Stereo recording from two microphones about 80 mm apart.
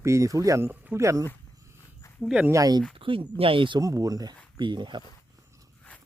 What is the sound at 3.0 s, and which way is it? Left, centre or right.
Speech, right.